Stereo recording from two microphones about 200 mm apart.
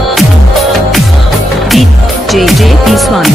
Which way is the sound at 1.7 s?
Centre (ahead or behind).